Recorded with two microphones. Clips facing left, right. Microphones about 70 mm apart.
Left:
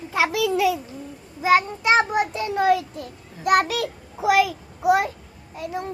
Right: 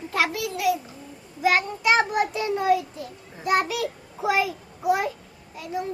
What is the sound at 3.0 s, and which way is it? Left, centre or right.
A child's voice, left.